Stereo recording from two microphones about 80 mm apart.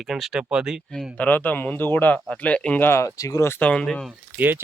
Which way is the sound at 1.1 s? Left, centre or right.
Left.